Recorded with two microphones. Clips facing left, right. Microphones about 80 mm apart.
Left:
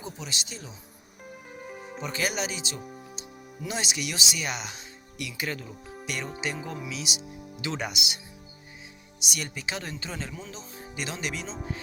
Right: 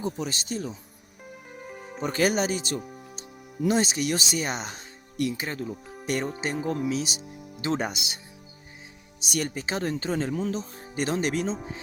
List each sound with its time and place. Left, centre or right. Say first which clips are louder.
0.0 s speech: right 7 dB; right
1.3 s music: even; centre
2.0 s speech: right 6 dB; right
5.4 s speech: right 2 dB; right
9.2 s speech: right 5 dB; right
11.5 s speech: right 1 dB; centre